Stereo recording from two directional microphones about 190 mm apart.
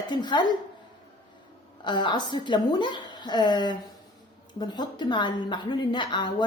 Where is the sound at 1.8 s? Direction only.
25° left (ahead or behind).